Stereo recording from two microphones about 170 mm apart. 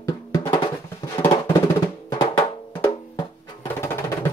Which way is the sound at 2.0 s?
25° left (ahead or behind).